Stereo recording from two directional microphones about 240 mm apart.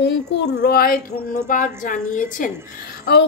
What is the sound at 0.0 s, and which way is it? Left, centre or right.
A woman's voice, left.